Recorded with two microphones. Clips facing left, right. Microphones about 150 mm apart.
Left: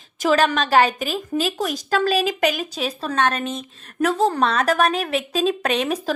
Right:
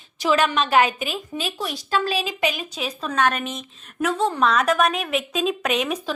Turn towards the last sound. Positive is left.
turn(degrees=35)  # may be behind; listen again after turning